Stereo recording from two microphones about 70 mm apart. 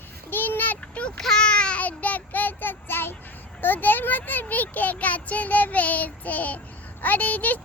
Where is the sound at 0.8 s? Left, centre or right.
Centre.